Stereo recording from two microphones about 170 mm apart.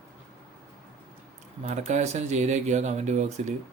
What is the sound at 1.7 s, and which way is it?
Speech, 45° right (ahead or behind).